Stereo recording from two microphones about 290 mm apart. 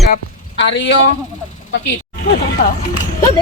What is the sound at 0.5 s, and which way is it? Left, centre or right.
Speech, left.